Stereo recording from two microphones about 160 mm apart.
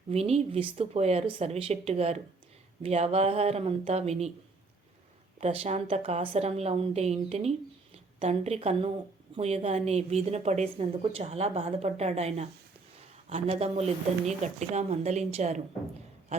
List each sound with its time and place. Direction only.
0.1 s a woman's voice: 40° right (ahead or behind)
5.4 s a woman's voice: 40° right (ahead or behind)